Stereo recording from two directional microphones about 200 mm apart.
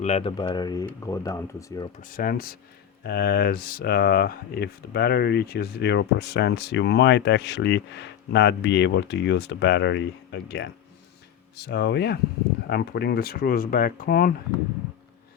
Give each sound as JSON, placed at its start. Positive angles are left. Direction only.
{"t": 0.0, "sound": "speech", "side_deg": 30}
{"t": 2.0, "sound": "speech", "side_deg": 45}